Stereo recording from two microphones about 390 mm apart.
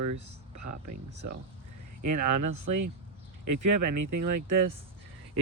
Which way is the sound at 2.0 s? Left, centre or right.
Right.